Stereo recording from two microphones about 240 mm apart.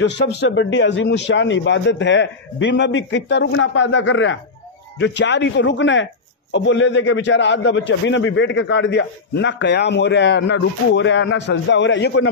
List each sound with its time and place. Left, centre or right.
0.0 s a man's voice: left